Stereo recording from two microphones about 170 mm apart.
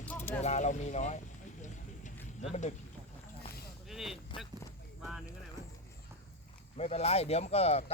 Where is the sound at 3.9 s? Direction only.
Centre (ahead or behind).